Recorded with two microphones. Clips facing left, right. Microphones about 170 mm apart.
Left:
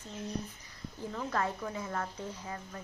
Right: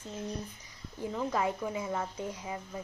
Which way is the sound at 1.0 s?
10° right (ahead or behind).